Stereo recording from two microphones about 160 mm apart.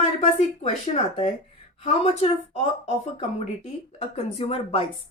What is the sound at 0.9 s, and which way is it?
Speech, 45° left (ahead or behind).